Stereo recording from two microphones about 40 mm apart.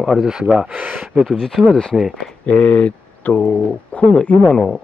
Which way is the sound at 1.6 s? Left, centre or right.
Right.